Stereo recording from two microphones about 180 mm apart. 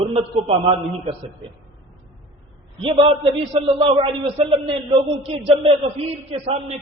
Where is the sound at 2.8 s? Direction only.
30° right (ahead or behind).